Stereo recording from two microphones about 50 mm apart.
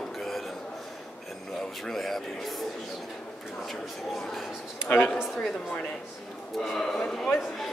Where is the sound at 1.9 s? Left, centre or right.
Centre.